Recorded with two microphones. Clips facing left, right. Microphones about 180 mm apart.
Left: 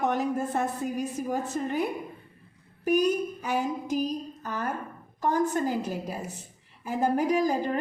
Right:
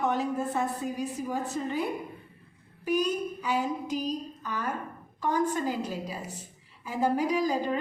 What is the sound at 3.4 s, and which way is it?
A woman's voice, 45° left (ahead or behind).